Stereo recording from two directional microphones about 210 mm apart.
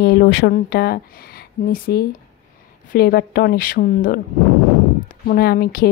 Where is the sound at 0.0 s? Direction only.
50° left (ahead or behind).